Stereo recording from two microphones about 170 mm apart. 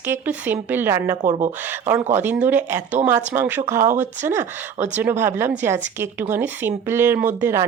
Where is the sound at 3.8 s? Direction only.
45° right (ahead or behind).